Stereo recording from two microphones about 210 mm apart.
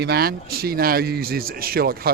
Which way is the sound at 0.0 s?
50° right (ahead or behind).